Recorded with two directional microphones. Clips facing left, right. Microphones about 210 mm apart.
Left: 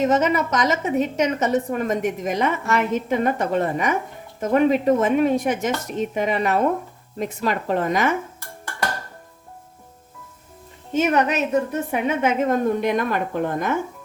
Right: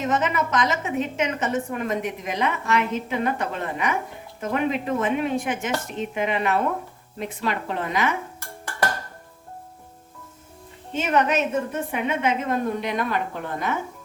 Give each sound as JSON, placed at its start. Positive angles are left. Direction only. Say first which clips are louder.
{"t": 0.1, "sound": "a woman's voice", "louder": "left 4 dB", "side_deg": 40}
{"t": 10.9, "sound": "a woman's voice", "louder": "left 2 dB", "side_deg": 35}